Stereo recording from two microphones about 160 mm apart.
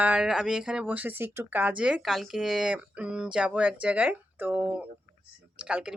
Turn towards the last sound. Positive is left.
turn(degrees=-5)  # may be behind; listen again after turning